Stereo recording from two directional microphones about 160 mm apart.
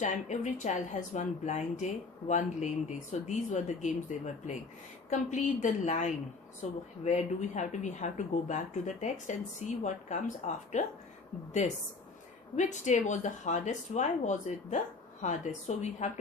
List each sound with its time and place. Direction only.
0.0 s speech: 50° left (ahead or behind)
5.1 s speech: 50° left (ahead or behind)
12.5 s speech: 50° left (ahead or behind)